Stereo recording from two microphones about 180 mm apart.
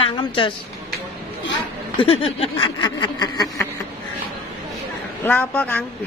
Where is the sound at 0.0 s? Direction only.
30° left (ahead or behind).